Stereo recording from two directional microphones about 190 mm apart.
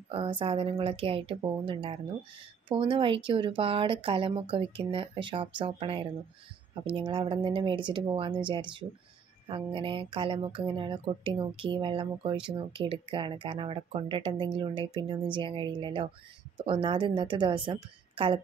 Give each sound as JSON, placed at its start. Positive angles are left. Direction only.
{"t": 0.1, "sound": "speech", "side_deg": -25}